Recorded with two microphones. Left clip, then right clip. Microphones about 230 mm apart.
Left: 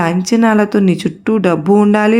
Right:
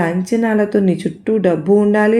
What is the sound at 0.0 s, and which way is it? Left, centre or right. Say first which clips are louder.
Speech: left 4 dB; left.